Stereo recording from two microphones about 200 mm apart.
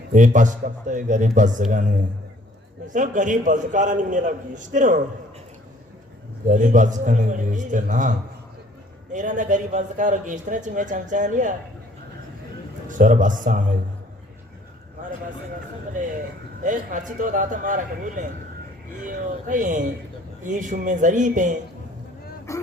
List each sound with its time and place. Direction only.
0.1 s a man's voice: 40° right (ahead or behind)
6.5 s a man's voice: 40° right (ahead or behind)
9.1 s a man's voice: 40° right (ahead or behind)
12.9 s a man's voice: 40° right (ahead or behind)
16.6 s a man's voice: 40° right (ahead or behind)
19.5 s a man's voice: 40° right (ahead or behind)
22.5 s dog: 15° left (ahead or behind)